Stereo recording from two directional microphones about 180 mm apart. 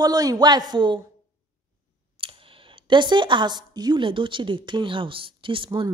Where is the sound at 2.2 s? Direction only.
30° right (ahead or behind).